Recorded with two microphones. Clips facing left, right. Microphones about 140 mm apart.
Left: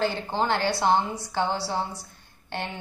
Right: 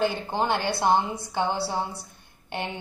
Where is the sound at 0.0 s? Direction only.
10° right (ahead or behind).